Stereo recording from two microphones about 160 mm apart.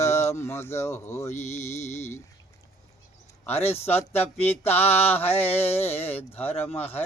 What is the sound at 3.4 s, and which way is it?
Speech, 15° left (ahead or behind).